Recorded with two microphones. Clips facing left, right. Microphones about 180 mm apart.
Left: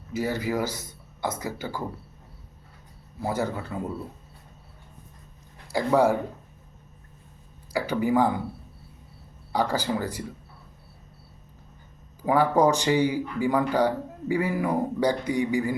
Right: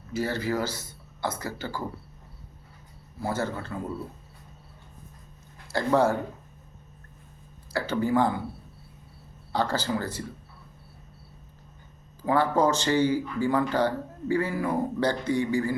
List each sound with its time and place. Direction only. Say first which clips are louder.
0.1 s speech: left 1 dB; 15° left (ahead or behind)
3.2 s speech: left 2 dB; 15° left (ahead or behind)
5.7 s speech: left 2 dB; 10° left (ahead or behind)
7.7 s speech: left 1 dB; 15° left (ahead or behind)
9.5 s speech: left 1 dB; 15° left (ahead or behind)
12.2 s speech: left 2 dB; 15° left (ahead or behind)